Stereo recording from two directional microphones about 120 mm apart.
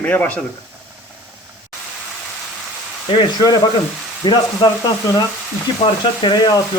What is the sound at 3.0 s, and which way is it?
Speech, 45° left (ahead or behind).